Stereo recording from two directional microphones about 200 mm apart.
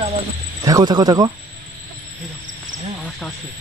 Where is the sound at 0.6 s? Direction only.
20° right (ahead or behind).